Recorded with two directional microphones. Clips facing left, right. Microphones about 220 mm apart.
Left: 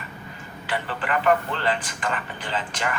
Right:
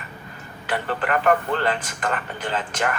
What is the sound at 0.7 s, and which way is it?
A man's voice, 50° right (ahead or behind).